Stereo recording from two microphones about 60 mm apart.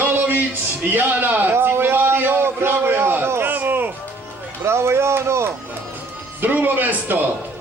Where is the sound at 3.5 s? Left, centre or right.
Right.